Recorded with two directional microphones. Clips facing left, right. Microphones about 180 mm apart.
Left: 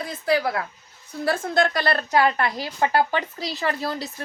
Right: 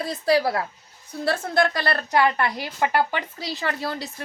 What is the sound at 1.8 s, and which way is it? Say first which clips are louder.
A woman's voice: left 1 dB; 20° left (ahead or behind).